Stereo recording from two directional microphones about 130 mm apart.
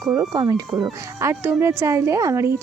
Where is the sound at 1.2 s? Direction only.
15° right (ahead or behind).